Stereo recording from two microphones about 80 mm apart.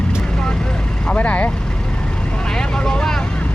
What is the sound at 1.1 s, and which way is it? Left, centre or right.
Speech, centre.